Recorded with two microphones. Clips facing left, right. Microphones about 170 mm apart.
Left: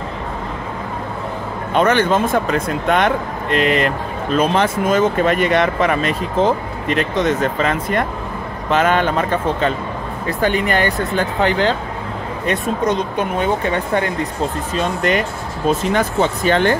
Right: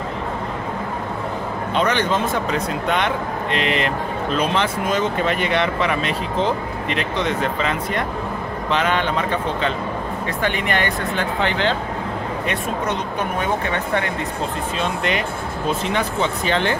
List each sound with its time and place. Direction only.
1.7 s speech: 50° left (ahead or behind); by 14.0 s 35° left (ahead or behind)
14.8 s speech: 45° left (ahead or behind)